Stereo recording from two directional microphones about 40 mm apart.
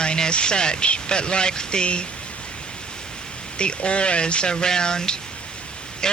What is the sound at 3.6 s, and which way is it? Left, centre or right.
Speech, left.